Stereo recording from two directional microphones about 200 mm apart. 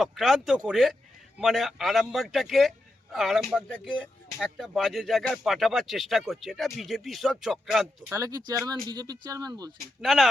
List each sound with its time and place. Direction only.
0.0 s speech: centre (ahead or behind)
8.1 s speech: 20° right (ahead or behind)
10.0 s speech: centre (ahead or behind)